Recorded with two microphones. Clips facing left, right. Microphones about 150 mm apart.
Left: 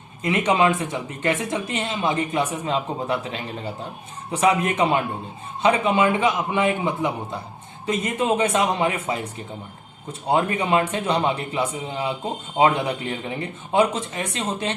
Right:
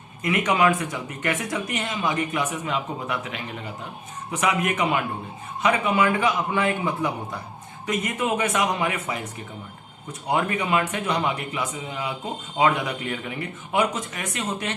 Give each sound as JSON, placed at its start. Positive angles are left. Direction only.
{"t": 0.2, "sound": "a man's voice", "side_deg": 30}